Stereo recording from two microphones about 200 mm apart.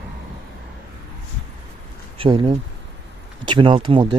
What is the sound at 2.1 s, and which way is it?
Speech, 25° right (ahead or behind).